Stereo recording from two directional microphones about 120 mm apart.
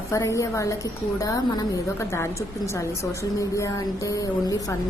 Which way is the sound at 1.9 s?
25° left (ahead or behind).